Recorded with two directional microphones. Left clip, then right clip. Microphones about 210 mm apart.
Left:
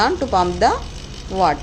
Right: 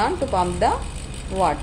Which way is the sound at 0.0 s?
25° left (ahead or behind).